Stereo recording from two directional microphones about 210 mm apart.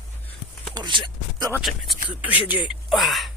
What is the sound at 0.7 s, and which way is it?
Speech, 20° right (ahead or behind).